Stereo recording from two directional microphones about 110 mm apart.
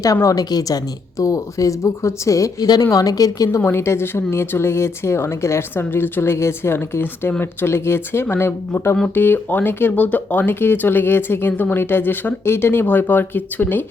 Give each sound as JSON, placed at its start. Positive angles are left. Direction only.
{"t": 0.0, "sound": "speech", "side_deg": 30}
{"t": 3.6, "sound": "speech", "side_deg": 20}